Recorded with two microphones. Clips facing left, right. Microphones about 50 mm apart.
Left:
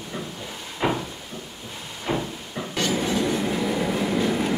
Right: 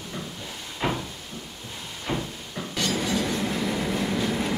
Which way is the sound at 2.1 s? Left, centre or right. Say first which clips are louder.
Left 3 dB; centre.